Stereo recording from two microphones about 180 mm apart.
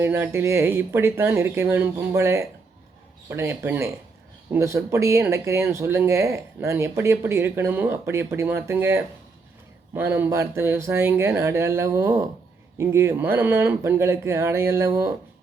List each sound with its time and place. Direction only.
0.0 s speech: 15° right (ahead or behind)